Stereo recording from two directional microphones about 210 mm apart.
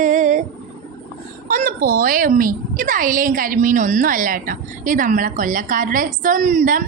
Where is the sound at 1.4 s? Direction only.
40° right (ahead or behind).